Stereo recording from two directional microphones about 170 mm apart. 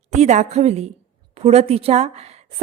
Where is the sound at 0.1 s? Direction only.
40° right (ahead or behind).